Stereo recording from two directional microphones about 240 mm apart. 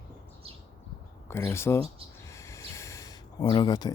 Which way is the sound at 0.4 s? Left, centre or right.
Right.